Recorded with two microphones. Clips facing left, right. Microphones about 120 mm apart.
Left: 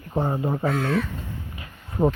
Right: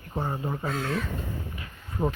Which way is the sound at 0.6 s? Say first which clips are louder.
Left 7 dB; 70° left (ahead or behind).